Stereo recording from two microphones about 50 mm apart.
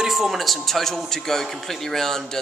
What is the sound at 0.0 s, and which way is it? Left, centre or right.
A man's voice, centre.